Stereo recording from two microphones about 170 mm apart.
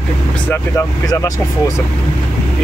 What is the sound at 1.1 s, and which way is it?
Speech, 20° left (ahead or behind).